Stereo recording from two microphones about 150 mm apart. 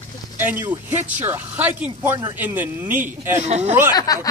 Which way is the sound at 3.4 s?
45° right (ahead or behind).